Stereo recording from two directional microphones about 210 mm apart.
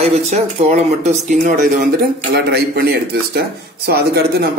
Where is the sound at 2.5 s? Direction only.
50° right (ahead or behind).